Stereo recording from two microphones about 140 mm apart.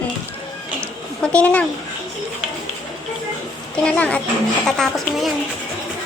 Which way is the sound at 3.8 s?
10° left (ahead or behind).